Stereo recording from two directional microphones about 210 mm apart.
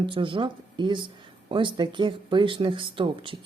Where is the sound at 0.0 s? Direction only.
25° right (ahead or behind).